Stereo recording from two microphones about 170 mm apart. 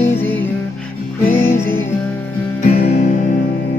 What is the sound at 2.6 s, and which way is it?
Music, 60° left (ahead or behind).